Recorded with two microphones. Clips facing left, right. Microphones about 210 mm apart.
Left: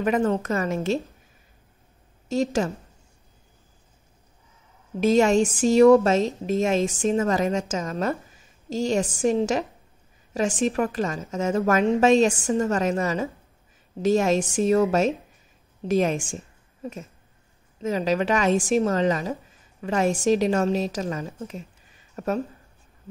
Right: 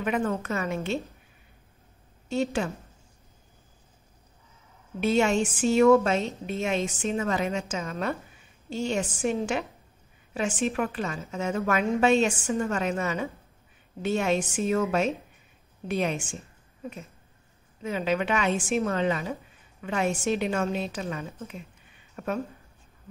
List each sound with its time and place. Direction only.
0.0 s a woman's voice: 40° left (ahead or behind)
2.2 s a woman's voice: 40° left (ahead or behind)
5.0 s a woman's voice: 40° left (ahead or behind)
17.8 s a woman's voice: 40° left (ahead or behind)